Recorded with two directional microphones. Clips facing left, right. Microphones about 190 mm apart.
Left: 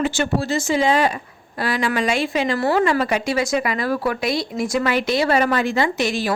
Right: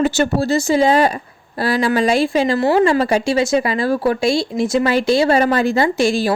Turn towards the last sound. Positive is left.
turn(degrees=-30)  # may be behind; listen again after turning